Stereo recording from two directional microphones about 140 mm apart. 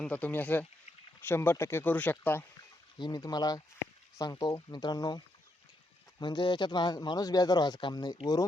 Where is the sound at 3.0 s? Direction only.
30° left (ahead or behind).